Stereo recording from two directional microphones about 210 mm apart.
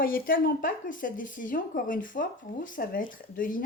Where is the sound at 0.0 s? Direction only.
40° left (ahead or behind).